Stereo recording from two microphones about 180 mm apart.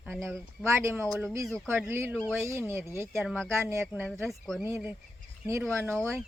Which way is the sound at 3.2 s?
Centre (ahead or behind).